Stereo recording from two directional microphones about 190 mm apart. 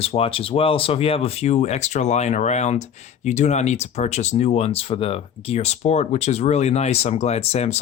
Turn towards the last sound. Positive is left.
turn(degrees=35)  # may be behind; listen again after turning